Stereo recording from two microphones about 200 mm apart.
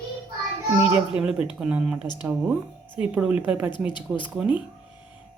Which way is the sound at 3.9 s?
25° left (ahead or behind).